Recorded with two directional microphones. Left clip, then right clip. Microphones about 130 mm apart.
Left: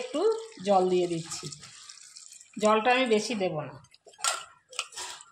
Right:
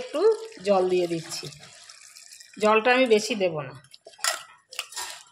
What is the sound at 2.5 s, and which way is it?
Speech, 25° right (ahead or behind).